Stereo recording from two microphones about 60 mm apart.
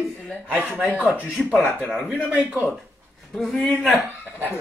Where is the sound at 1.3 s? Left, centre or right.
Centre.